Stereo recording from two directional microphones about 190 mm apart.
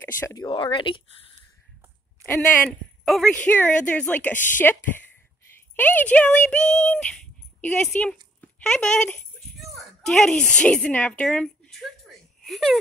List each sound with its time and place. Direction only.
0.2 s speech: 20° left (ahead or behind)
3.1 s a woman's voice: 5° left (ahead or behind)
6.5 s child singing: 5° left (ahead or behind)
7.6 s a woman's voice: 5° left (ahead or behind)
8.4 s a sound: 5° left (ahead or behind)